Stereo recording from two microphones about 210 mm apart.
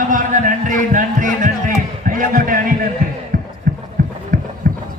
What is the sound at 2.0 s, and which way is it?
Music, 40° right (ahead or behind).